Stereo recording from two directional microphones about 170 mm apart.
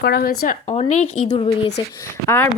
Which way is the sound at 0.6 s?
40° left (ahead or behind).